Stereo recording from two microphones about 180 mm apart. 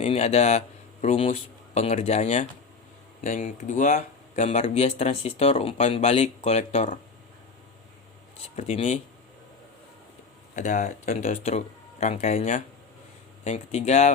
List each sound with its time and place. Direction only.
0.0 s speech: 35° left (ahead or behind)
8.5 s speech: 40° left (ahead or behind)
10.5 s speech: 45° left (ahead or behind)